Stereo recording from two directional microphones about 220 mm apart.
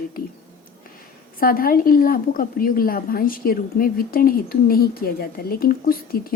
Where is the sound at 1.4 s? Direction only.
40° left (ahead or behind).